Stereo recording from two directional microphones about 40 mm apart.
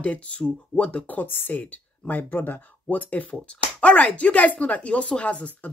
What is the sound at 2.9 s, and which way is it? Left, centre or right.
Speech, left.